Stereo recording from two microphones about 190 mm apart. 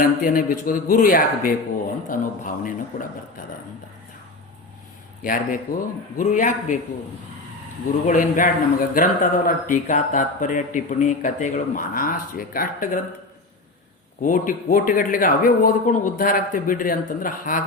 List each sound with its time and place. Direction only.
0.0 s speech: 45° left (ahead or behind)
5.2 s a man's voice: 45° left (ahead or behind)
8.0 s speech: 45° left (ahead or behind)
14.2 s speech: 45° left (ahead or behind)